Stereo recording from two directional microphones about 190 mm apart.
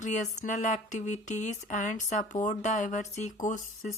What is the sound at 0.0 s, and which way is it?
Speech, 40° left (ahead or behind).